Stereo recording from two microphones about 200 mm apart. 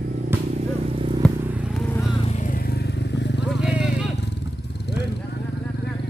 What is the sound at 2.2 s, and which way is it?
Vehicle, 35° left (ahead or behind).